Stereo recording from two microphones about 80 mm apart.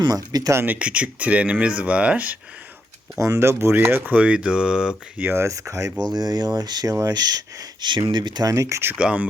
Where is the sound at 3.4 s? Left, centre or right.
Right; by 4.9 s centre.